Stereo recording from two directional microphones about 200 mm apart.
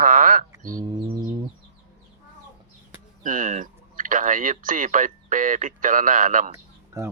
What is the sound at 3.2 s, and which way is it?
Speech, 40° right (ahead or behind).